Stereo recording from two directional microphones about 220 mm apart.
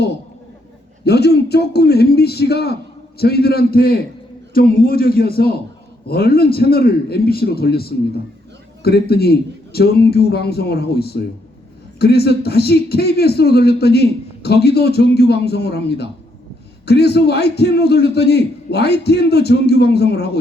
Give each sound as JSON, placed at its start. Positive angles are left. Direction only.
{"t": 1.0, "sound": "speech", "side_deg": 50}